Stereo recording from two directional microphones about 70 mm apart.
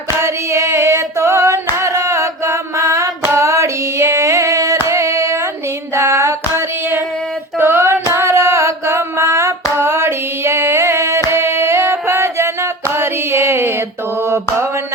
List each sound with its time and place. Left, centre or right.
0.2 s singing: right
5.9 s music: right
7.6 s female singing: right
8.1 s hands: right
11.3 s singing: right
12.9 s a sound: right
14.3 s mantra: right